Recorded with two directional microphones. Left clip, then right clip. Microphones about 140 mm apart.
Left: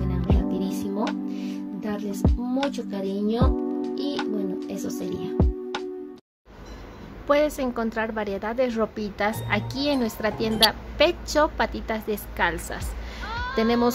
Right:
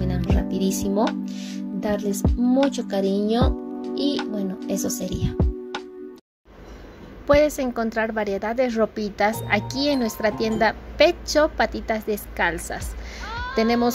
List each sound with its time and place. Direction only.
0.0 s music: centre (ahead or behind)
2.0 s speech: centre (ahead or behind)
7.2 s a woman's voice: 25° right (ahead or behind)
13.2 s a sound: centre (ahead or behind)